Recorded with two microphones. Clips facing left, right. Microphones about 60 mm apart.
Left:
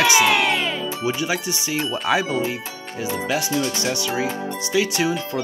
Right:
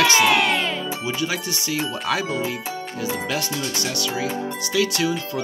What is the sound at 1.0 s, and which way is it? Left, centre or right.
Speech, left.